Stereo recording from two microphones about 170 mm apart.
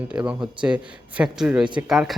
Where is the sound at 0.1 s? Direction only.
5° right (ahead or behind).